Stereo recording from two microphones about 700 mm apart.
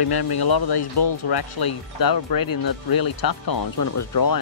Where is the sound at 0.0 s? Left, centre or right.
Left.